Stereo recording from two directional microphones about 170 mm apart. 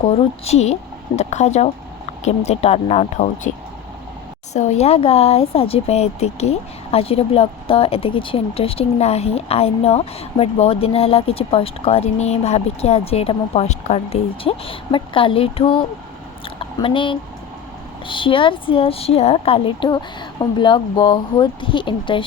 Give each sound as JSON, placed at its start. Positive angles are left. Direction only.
{"t": 0.0, "sound": "speech", "side_deg": 40}
{"t": 4.5, "sound": "a woman's voice", "side_deg": 40}